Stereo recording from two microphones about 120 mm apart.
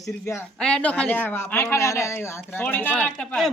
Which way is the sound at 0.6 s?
10° left (ahead or behind).